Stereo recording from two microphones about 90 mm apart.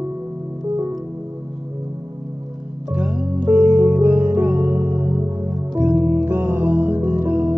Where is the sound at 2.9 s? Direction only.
20° right (ahead or behind).